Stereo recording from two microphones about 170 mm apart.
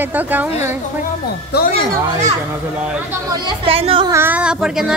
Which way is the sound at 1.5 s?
75° left (ahead or behind).